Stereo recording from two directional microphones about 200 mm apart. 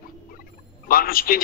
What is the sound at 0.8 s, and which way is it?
Speech, 45° left (ahead or behind).